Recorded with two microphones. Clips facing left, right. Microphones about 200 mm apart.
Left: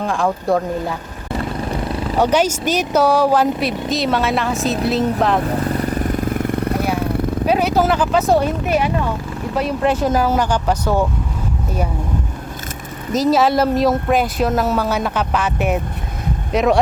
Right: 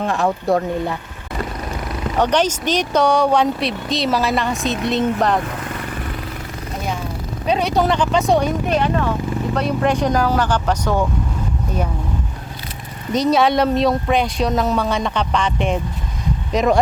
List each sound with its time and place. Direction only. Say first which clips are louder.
0.0 s speech: even; centre (ahead or behind)
2.1 s speech: left 1 dB; 10° left (ahead or behind)
5.5 s vehicle: left 8 dB; 35° left (ahead or behind); by 6.8 s 60° left (ahead or behind)
7.4 s speech: left 1 dB; 5° left (ahead or behind)
13.1 s speech: left 1 dB; centre (ahead or behind)